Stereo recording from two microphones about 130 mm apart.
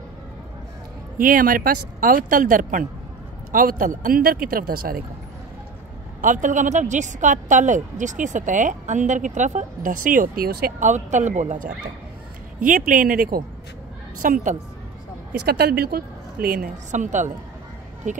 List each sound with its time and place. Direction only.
1.1 s speech: 90° right
6.2 s a woman's voice: 80° right
12.5 s a woman's voice: 90° right
16.4 s a woman's voice: 90° right; by 18.2 s 70° right (ahead or behind)